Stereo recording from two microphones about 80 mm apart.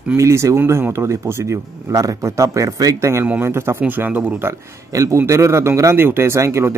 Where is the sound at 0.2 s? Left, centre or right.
Right.